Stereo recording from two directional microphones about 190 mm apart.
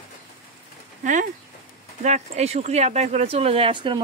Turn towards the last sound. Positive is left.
turn(degrees=-25)  # may be behind; listen again after turning